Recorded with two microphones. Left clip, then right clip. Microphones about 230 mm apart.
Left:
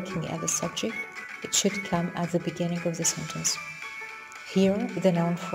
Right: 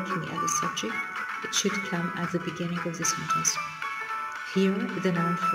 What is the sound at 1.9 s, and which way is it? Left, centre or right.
Speech, left.